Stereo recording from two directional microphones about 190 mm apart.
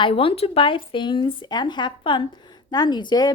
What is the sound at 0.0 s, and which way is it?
A woman's voice, 30° left (ahead or behind).